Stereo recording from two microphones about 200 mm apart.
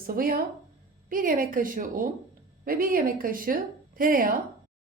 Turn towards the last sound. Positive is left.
turn(degrees=-45)  # may be behind; listen again after turning